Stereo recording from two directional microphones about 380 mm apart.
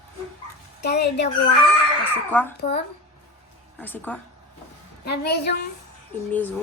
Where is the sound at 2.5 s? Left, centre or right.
Left.